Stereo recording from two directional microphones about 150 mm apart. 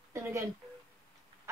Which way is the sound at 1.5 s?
20° right (ahead or behind).